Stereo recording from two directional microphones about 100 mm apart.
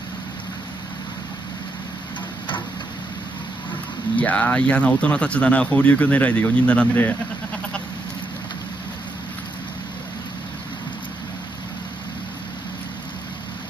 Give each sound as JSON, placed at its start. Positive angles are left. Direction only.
{"t": 4.2, "sound": "speech", "side_deg": 15}